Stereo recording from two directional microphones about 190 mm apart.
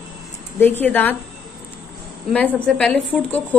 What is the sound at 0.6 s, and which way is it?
Speech, 10° left (ahead or behind).